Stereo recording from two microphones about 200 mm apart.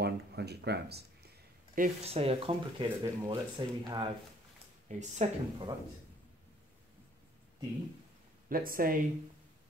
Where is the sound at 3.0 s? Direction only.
20° right (ahead or behind).